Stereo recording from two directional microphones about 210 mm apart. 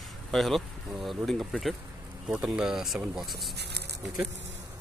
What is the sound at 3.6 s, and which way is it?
Speech, 50° right (ahead or behind).